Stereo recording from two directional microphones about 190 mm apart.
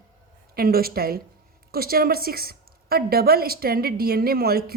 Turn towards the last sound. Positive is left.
turn(degrees=-55)  # may be behind; listen again after turning